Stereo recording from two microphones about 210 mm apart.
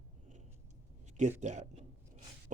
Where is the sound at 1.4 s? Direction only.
35° right (ahead or behind).